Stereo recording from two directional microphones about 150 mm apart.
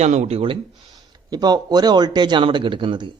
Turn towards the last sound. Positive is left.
turn(degrees=-30)  # may be behind; listen again after turning